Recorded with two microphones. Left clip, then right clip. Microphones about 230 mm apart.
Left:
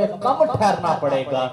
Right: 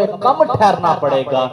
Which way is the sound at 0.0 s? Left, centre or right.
Right.